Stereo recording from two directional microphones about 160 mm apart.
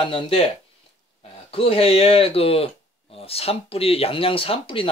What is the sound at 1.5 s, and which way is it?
Speech, 35° left (ahead or behind).